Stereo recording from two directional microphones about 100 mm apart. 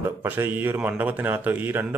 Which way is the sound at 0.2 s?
20° right (ahead or behind).